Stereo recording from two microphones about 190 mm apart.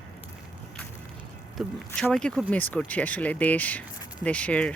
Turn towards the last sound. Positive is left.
turn(degrees=5)  # may be behind; listen again after turning